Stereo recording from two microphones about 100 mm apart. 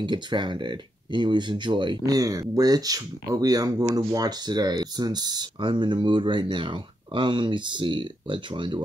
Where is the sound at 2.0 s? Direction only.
35° right (ahead or behind).